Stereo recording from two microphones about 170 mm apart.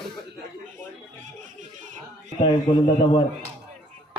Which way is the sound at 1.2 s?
50° right (ahead or behind).